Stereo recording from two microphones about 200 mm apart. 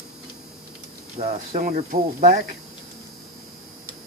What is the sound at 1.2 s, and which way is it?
Speech, 35° right (ahead or behind).